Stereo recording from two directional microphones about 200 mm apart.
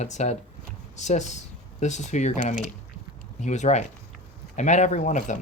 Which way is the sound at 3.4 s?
35° left (ahead or behind).